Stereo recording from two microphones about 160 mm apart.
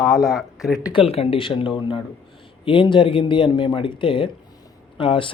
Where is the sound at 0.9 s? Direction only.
35° left (ahead or behind).